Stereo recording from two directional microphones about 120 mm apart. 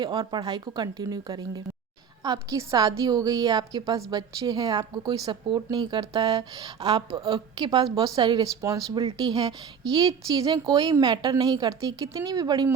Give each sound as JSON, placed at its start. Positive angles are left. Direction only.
{"t": 0.0, "sound": "a woman's voice", "side_deg": -40}